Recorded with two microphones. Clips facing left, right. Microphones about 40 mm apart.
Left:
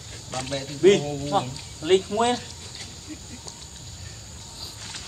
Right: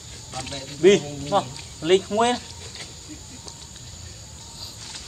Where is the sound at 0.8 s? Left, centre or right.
Centre.